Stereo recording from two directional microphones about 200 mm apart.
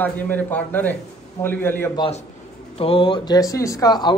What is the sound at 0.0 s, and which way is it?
Speech, 10° left (ahead or behind).